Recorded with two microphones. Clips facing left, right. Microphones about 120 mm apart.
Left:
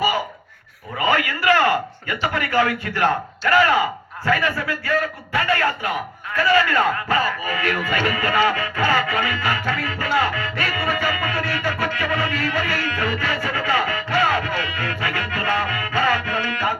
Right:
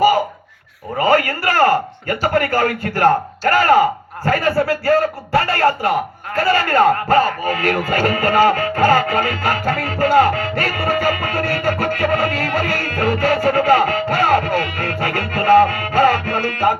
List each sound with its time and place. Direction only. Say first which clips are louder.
0.9 s a man's voice: right 6 dB; 40° right (ahead or behind)